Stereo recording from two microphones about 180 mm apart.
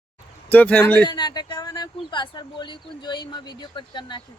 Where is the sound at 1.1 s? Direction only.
25° left (ahead or behind).